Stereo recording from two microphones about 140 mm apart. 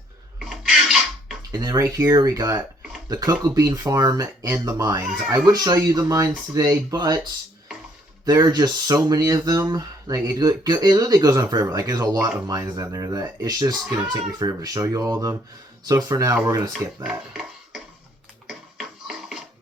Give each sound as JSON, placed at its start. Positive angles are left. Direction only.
{"t": 0.3, "sound": "a sound", "side_deg": -5}
{"t": 1.4, "sound": "speech", "side_deg": -25}
{"t": 5.0, "sound": "speech", "side_deg": -5}
{"t": 5.5, "sound": "speech", "side_deg": -25}
{"t": 8.2, "sound": "speech", "side_deg": -25}
{"t": 17.0, "sound": "speech", "side_deg": -5}
{"t": 18.4, "sound": "music", "side_deg": -5}